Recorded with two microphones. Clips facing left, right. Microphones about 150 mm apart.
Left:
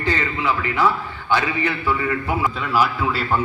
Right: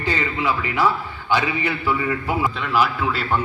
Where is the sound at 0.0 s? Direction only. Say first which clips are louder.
Even; 15° right (ahead or behind).